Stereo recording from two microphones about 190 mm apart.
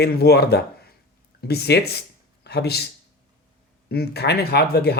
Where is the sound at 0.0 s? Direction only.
55° left (ahead or behind).